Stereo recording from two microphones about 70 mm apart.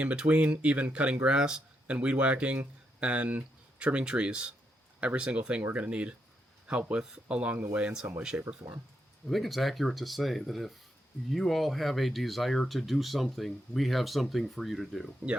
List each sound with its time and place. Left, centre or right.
0.0 s speech: centre
9.2 s speech: centre